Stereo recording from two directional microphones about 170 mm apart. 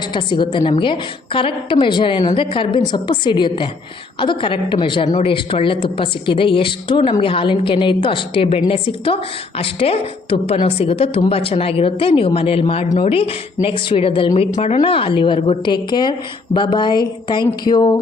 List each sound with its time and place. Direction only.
0.1 s a woman's voice: 30° left (ahead or behind)
5.0 s speech: 45° left (ahead or behind)
5.3 s a woman's voice: 30° left (ahead or behind)